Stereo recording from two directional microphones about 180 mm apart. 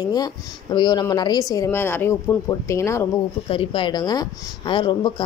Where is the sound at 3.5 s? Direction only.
30° left (ahead or behind).